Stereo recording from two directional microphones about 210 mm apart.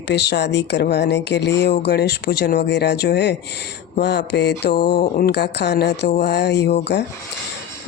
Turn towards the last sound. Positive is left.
turn(degrees=55)  # may be behind; listen again after turning